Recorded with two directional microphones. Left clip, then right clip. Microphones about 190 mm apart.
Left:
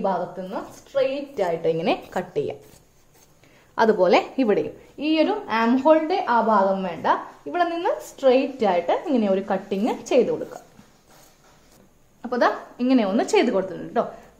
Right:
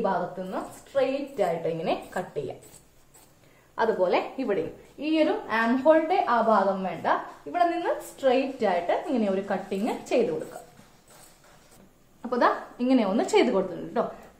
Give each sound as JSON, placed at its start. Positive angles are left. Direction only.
{"t": 0.0, "sound": "a woman's voice", "side_deg": 40}
{"t": 3.7, "sound": "a woman's voice", "side_deg": 55}
{"t": 12.2, "sound": "a woman's voice", "side_deg": 20}